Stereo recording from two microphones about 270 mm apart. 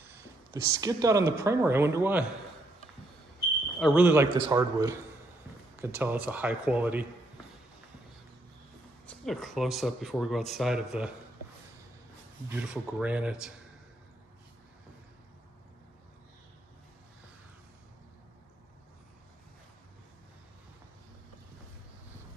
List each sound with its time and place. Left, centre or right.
0.0 s speech: centre
3.8 s speech: centre
9.0 s speech: centre
12.4 s speech: centre